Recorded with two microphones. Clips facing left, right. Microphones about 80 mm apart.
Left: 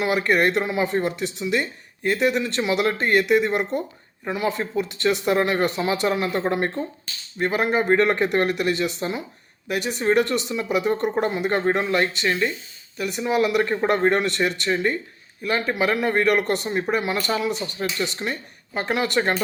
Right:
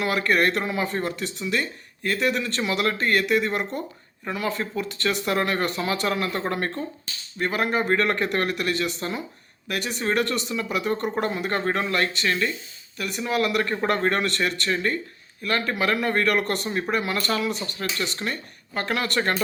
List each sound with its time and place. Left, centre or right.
0.0 s speech: centre